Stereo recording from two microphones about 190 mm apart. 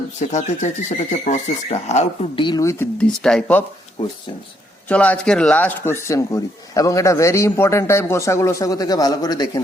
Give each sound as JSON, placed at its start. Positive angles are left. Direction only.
{"t": 0.2, "sound": "speech", "side_deg": 40}
{"t": 2.4, "sound": "a man's voice", "side_deg": 20}
{"t": 4.9, "sound": "a man's voice", "side_deg": 5}